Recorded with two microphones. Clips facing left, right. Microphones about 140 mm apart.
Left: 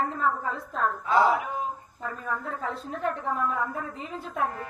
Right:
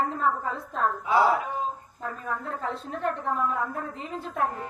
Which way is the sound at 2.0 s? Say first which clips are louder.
Even; centre (ahead or behind).